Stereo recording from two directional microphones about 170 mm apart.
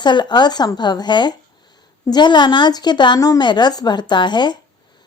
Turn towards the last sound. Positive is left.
turn(degrees=25)  # may be behind; listen again after turning